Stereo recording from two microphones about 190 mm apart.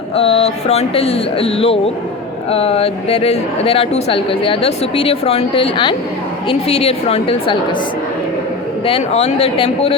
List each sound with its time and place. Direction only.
0.2 s speech: 30° left (ahead or behind)
8.9 s speech: 30° left (ahead or behind)